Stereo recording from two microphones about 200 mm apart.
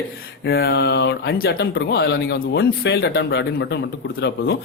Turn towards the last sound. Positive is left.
turn(degrees=60)  # may be behind; listen again after turning